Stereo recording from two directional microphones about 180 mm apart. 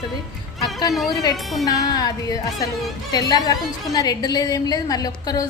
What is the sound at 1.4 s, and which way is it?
Music, centre (ahead or behind).